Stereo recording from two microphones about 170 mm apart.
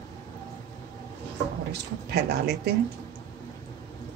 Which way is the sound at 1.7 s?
75° right (ahead or behind).